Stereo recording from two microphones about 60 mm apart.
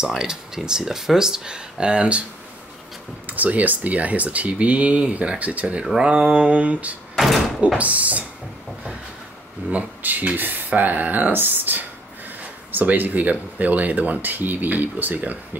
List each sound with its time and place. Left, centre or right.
0.0 s speech: centre
3.3 s speech: right
7.2 s speech: centre
7.6 s speech: right
9.7 s speech: right